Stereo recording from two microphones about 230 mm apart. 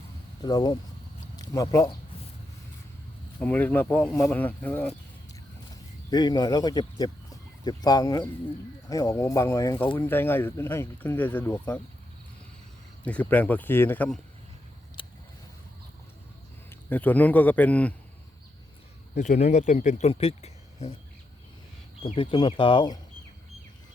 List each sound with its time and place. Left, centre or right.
0.4 s speech: centre
3.4 s speech: centre
6.1 s speech: centre
13.1 s speech: centre
15.0 s squish: left
16.9 s speech: centre
19.1 s speech: left
22.0 s speech: left